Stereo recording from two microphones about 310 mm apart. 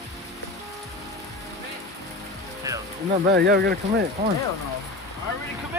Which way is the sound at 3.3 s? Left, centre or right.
Right.